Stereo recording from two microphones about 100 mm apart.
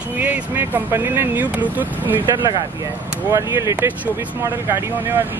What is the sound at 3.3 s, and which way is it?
Speech, 30° right (ahead or behind).